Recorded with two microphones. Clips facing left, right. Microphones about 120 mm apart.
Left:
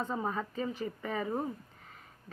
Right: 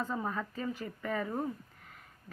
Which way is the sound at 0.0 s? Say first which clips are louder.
Left 1 dB; 25° left (ahead or behind).